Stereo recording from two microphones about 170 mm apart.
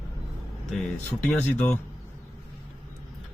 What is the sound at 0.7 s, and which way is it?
Speech, 5° left (ahead or behind).